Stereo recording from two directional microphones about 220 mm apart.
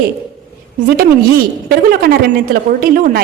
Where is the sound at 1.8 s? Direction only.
45° right (ahead or behind).